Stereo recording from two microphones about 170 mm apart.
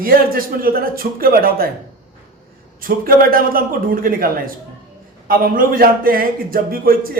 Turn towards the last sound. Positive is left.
turn(degrees=-60)  # may be behind; listen again after turning